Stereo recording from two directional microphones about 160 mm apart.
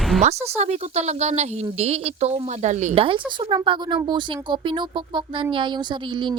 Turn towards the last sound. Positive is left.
turn(degrees=-30)  # may be behind; listen again after turning